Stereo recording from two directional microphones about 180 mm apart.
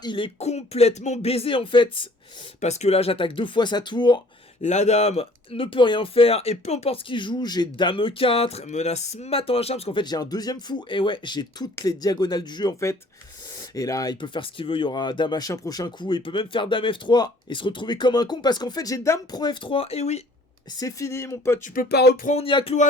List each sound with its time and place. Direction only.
0.0 s speech: 25° left (ahead or behind)
4.6 s speech: 40° left (ahead or behind)
20.7 s speech: 15° left (ahead or behind)
21.6 s speech: 60° left (ahead or behind)
22.3 s speech: 30° left (ahead or behind)